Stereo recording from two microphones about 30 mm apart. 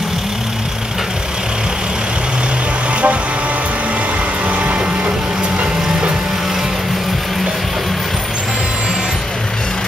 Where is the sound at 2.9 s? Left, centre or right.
Right.